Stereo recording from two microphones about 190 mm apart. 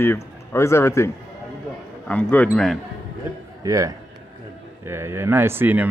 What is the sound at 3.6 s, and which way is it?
Speech, 20° right (ahead or behind).